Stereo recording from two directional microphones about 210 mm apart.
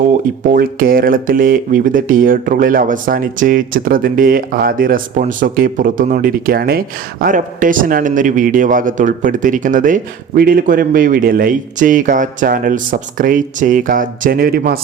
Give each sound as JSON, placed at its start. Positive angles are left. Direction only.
{"t": 0.5, "sound": "speech", "side_deg": -45}